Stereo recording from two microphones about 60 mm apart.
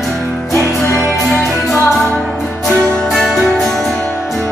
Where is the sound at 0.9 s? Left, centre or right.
Left.